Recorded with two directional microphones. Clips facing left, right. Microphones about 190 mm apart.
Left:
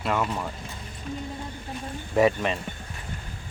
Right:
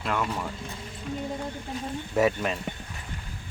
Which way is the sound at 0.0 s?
Centre (ahead or behind).